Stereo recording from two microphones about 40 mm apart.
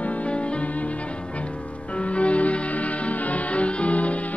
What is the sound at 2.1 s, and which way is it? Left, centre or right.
Music, left.